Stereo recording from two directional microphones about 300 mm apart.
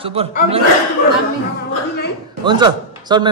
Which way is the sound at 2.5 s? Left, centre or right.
Centre.